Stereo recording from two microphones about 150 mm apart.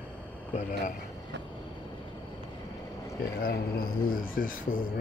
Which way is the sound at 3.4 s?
80° left.